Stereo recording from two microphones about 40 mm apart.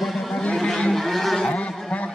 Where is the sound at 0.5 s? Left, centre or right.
Centre.